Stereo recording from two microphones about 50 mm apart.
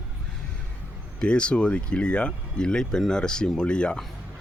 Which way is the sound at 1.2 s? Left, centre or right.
Left.